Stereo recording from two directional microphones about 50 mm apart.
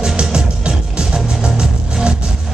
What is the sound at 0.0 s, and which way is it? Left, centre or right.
Music, centre.